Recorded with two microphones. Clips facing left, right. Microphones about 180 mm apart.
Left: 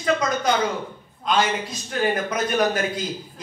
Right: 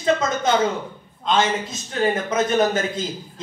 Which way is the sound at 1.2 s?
25° right (ahead or behind).